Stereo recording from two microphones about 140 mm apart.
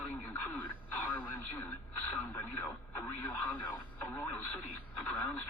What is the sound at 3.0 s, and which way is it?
Speech, 15° left (ahead or behind).